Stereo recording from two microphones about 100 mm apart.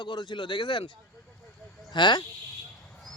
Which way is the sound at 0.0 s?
50° left (ahead or behind).